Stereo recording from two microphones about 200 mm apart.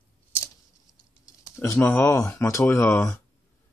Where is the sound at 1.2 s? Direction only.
15° left (ahead or behind).